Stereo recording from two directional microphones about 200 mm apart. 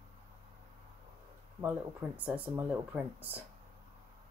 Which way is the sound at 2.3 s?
5° right (ahead or behind).